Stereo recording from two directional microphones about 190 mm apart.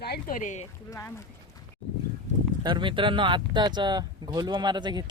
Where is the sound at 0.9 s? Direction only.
15° left (ahead or behind).